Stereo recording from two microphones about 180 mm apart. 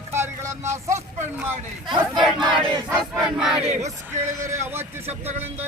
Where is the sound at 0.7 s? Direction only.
15° right (ahead or behind).